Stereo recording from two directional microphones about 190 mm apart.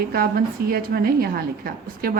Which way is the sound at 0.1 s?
50° right (ahead or behind).